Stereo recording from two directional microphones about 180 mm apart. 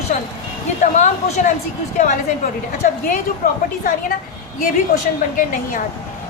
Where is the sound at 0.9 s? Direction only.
40° left (ahead or behind).